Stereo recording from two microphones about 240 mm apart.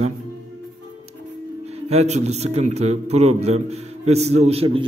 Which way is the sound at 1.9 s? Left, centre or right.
Right.